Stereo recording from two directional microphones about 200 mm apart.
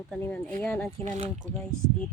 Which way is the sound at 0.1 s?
5° left (ahead or behind).